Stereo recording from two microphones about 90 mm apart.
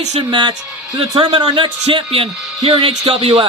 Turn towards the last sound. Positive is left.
turn(degrees=-55)  # may be behind; listen again after turning